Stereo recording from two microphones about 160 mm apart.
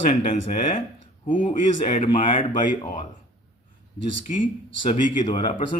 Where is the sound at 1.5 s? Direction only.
35° left (ahead or behind).